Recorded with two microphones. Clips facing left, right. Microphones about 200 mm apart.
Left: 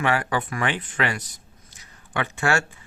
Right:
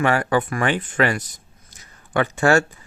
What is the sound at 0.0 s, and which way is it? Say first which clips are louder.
Speech: right 5 dB; 45° right (ahead or behind).